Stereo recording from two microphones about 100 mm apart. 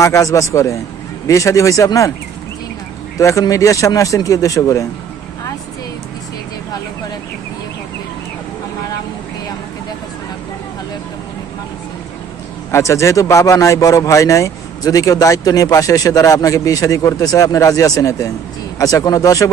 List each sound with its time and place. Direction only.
0.0 s a man's voice: 30° left (ahead or behind)
3.2 s a man's voice: 35° left (ahead or behind)
12.7 s a man's voice: 30° left (ahead or behind)